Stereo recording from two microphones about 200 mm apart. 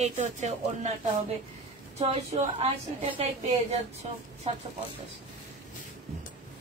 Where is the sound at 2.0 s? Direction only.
30° right (ahead or behind).